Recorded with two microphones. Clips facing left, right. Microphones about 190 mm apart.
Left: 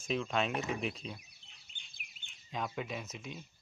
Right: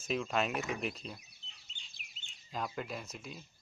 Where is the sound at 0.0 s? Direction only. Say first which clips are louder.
Even; centre (ahead or behind).